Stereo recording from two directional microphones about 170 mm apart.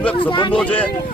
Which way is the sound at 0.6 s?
10° left (ahead or behind).